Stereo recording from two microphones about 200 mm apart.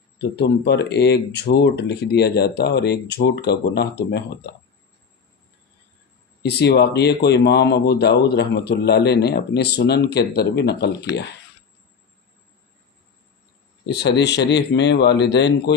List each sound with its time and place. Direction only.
0.2 s speech: 55° left (ahead or behind)
6.4 s speech: 55° left (ahead or behind)
13.8 s speech: 60° left (ahead or behind)